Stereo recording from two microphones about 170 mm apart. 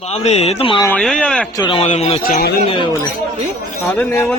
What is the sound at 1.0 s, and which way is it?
Speech, 5° left (ahead or behind).